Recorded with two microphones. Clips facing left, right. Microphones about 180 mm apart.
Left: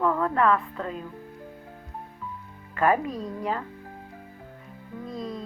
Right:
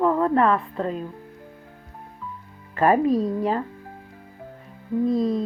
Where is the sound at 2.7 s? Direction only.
35° right (ahead or behind).